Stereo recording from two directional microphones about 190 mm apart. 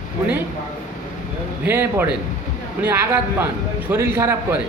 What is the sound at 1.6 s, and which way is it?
Speech, 10° right (ahead or behind).